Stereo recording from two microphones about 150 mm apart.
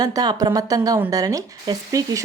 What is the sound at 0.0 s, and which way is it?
Speech, 25° right (ahead or behind).